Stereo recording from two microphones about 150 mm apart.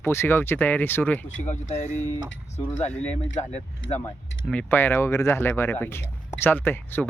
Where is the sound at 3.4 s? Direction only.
45° left (ahead or behind).